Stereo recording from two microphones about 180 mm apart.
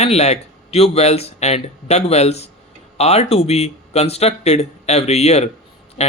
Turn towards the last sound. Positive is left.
turn(degrees=35)  # may be behind; listen again after turning